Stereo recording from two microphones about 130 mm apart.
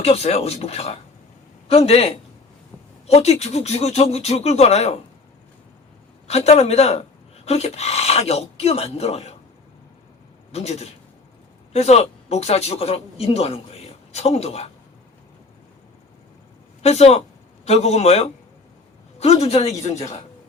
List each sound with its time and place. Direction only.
0.0 s a man's voice: 50° left (ahead or behind)
3.1 s speech: 55° left (ahead or behind)
6.2 s speech: 55° left (ahead or behind)
10.5 s speech: 55° left (ahead or behind)
16.8 s speech: 55° left (ahead or behind)